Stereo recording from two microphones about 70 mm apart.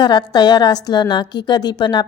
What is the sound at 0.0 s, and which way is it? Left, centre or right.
A woman's voice, left.